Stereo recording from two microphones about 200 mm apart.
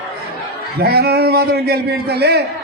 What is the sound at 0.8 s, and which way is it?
A man's voice, 50° right (ahead or behind).